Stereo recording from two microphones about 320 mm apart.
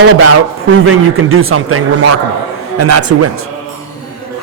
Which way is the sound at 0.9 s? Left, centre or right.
Right.